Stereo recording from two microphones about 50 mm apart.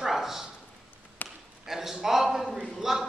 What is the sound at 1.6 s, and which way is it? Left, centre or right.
A man's voice, centre.